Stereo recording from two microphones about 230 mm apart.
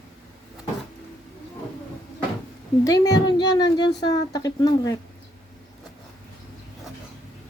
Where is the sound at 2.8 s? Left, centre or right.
Centre.